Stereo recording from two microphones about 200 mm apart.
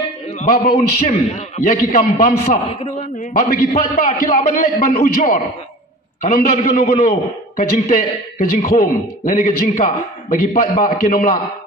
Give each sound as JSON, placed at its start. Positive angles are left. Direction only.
{"t": 0.4, "sound": "a man's voice", "side_deg": 40}